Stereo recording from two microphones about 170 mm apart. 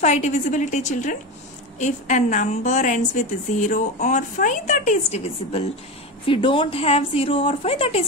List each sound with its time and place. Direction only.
0.0 s a woman's voice: 40° left (ahead or behind)
6.2 s a woman's voice: 30° left (ahead or behind)